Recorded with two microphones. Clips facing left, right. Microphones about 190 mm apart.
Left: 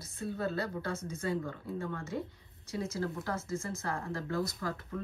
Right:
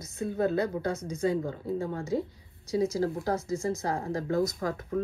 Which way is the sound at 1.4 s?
35° right (ahead or behind).